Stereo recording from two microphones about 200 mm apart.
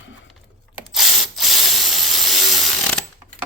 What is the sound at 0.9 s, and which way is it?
Tools, centre (ahead or behind).